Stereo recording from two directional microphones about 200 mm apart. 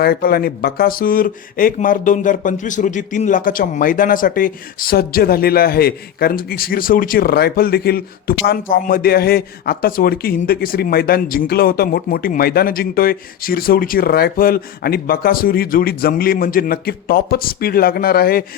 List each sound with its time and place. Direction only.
0.0 s speech: 50° left (ahead or behind)